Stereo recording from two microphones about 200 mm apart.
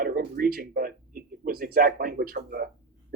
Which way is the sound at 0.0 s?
45° right (ahead or behind).